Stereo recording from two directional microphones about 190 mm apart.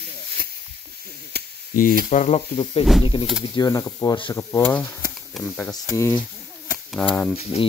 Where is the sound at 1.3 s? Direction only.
55° right (ahead or behind).